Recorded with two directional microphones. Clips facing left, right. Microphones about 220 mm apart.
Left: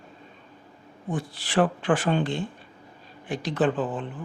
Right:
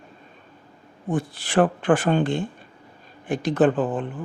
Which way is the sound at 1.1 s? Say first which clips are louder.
Right 5 dB; 50° right (ahead or behind).